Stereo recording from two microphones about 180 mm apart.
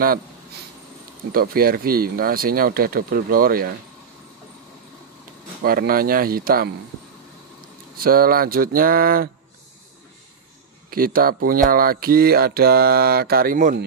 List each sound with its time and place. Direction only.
1.3 s speech: 55° right (ahead or behind)
5.6 s speech: 55° right (ahead or behind)
8.0 s a sound: 55° right (ahead or behind)
10.9 s speech: 55° right (ahead or behind)